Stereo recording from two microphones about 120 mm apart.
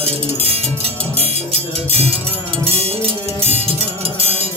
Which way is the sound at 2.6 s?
55° right (ahead or behind).